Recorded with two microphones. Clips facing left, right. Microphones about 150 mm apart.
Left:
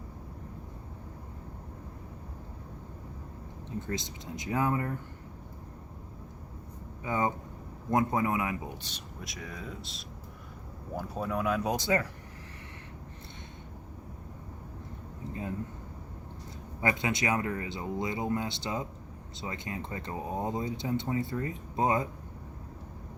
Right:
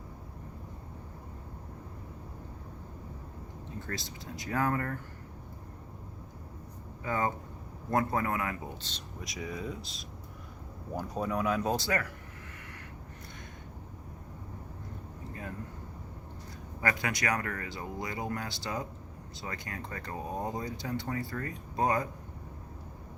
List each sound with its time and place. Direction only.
3.8 s speech: 20° left (ahead or behind)
7.0 s speech: 20° left (ahead or behind)
9.2 s speech: centre (ahead or behind)
11.7 s speech: 20° left (ahead or behind)
15.3 s a sound: 20° left (ahead or behind)
16.8 s speech: 20° left (ahead or behind)